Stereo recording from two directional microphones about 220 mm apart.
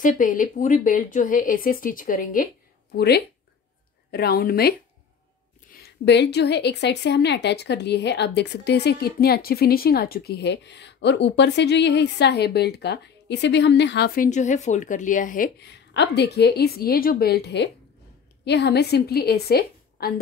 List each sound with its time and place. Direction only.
0.0 s speech: 35° left (ahead or behind)
6.0 s a woman's voice: 50° left (ahead or behind)